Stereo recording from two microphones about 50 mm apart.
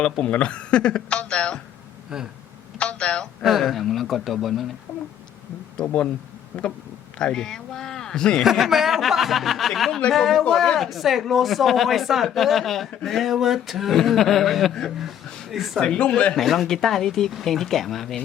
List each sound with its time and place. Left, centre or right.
0.3 s speech: left
2.1 s speech: centre
2.7 s speech: left
3.6 s speech: centre
4.9 s speech: left
5.7 s speech: left
6.5 s speech: right
7.2 s a man's voice: centre
8.4 s speech: centre
15.8 s speech: centre
16.3 s speech: centre